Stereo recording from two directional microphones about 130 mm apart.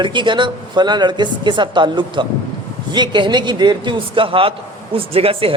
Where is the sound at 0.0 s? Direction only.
35° right (ahead or behind).